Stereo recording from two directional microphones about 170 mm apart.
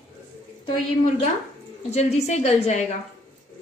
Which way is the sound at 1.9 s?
40° left (ahead or behind).